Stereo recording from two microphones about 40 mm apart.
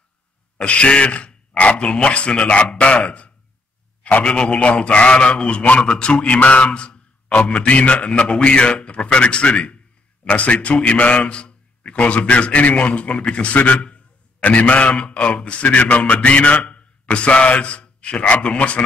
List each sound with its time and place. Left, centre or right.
0.6 s a man's voice: left
15.6 s a man's voice: left